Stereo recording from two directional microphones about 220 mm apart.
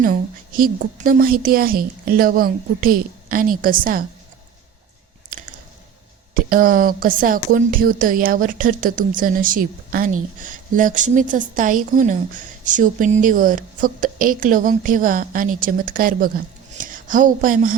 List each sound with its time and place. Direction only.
0.0 s a woman's voice: 40° right (ahead or behind)
6.3 s a woman's voice: 40° right (ahead or behind)